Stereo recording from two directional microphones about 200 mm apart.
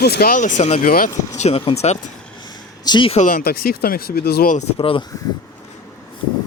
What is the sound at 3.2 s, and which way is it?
Speech, 50° left (ahead or behind).